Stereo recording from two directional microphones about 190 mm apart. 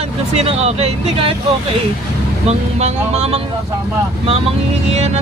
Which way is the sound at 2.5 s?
35° right (ahead or behind).